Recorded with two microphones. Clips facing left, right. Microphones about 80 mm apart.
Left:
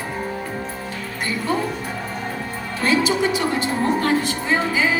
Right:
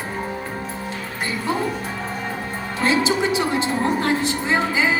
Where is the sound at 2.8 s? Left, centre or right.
Right.